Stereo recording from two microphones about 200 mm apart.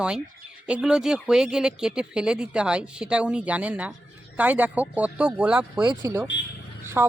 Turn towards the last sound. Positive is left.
turn(degrees=-10)  # may be behind; listen again after turning